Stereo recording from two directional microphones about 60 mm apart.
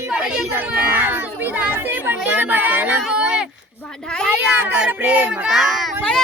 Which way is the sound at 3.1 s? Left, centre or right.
Centre.